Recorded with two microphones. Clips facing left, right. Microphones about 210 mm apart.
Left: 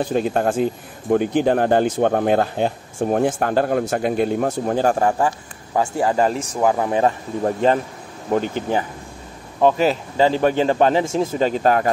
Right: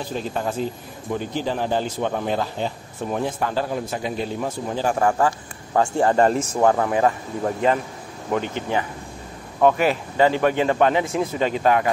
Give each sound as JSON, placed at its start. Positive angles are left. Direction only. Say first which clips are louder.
{"t": 0.0, "sound": "speech", "louder": "left 7 dB", "side_deg": 55}
{"t": 4.9, "sound": "speech", "louder": "left 1 dB", "side_deg": 25}
{"t": 5.7, "sound": "speech", "louder": "right 1 dB", "side_deg": 5}
{"t": 6.9, "sound": "speech", "louder": "left 1 dB", "side_deg": 30}
{"t": 9.8, "sound": "a man's voice", "louder": "left 2 dB", "side_deg": 30}